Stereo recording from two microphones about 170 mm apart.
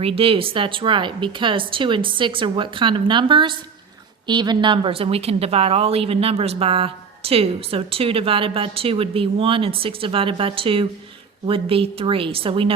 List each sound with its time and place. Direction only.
0.0 s a woman's voice: 35° right (ahead or behind)